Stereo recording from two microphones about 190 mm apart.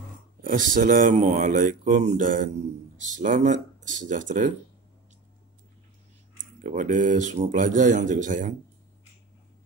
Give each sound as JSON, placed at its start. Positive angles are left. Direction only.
{"t": 0.4, "sound": "speech", "side_deg": -45}
{"t": 6.6, "sound": "speech", "side_deg": -45}